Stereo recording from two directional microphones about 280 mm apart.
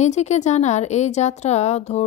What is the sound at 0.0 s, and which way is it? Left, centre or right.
Speech, left.